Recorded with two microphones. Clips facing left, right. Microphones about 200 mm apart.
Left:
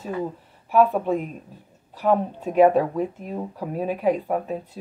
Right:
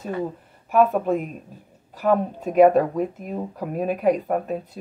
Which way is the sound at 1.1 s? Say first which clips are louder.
Right 1 dB; 5° right (ahead or behind).